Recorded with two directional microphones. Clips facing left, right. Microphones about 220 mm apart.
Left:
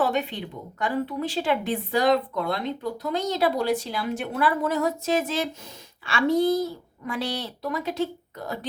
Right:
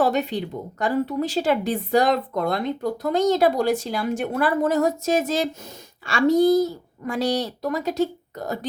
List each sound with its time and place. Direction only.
0.0 s speech: 40° right (ahead or behind)